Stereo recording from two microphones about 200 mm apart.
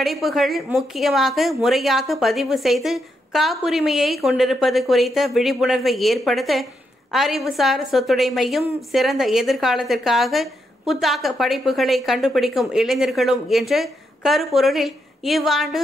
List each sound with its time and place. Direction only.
0.0 s speech: centre (ahead or behind)